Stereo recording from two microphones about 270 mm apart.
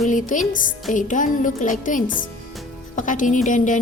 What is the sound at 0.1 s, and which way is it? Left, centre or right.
A woman's voice, left.